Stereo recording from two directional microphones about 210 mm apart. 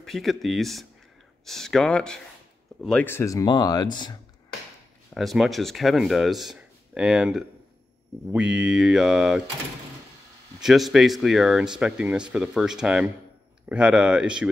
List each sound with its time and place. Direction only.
0.0 s speech: centre (ahead or behind); by 4.2 s 20° left (ahead or behind)
5.1 s speech: centre (ahead or behind)
10.6 s speech: centre (ahead or behind)